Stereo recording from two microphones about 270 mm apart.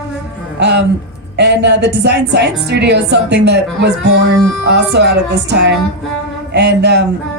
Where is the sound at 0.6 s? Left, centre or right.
Right.